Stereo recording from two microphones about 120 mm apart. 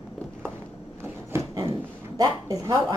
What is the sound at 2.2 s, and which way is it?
Speech, 30° right (ahead or behind).